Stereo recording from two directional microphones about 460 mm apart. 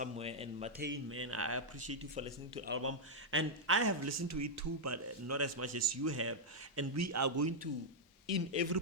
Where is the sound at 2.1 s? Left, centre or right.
Centre.